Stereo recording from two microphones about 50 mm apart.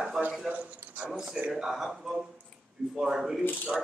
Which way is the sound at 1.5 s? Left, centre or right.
Centre.